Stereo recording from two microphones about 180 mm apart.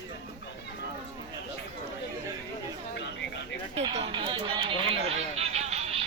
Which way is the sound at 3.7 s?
35° right (ahead or behind).